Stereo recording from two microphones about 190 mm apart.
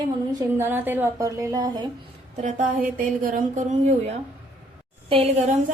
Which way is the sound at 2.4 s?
45° right (ahead or behind).